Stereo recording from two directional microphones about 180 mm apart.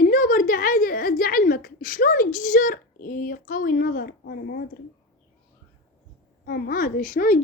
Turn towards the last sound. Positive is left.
turn(degrees=45)  # may be behind; listen again after turning